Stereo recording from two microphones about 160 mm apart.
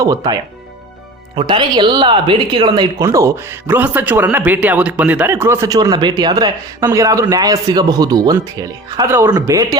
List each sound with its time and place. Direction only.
0.0 s speech: 25° right (ahead or behind)
1.4 s speech: 30° right (ahead or behind)